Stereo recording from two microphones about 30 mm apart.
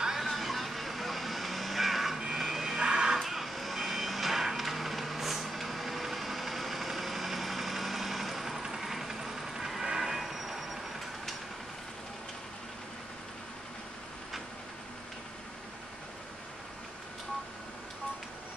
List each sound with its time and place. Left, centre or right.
0.3 s vehicle: centre
2.1 s vehicle: centre
2.8 s music: right
3.2 s vehicle: centre
8.8 s train: centre
10.2 s vehicle: centre